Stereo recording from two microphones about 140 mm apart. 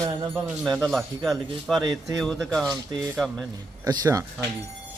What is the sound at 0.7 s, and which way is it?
Speech, centre (ahead or behind).